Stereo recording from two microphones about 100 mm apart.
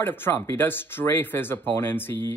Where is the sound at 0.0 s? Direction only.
20° left (ahead or behind).